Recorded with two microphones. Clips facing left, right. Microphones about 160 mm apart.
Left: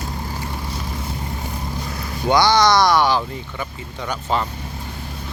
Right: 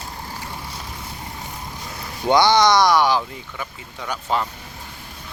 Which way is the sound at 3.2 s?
Centre (ahead or behind).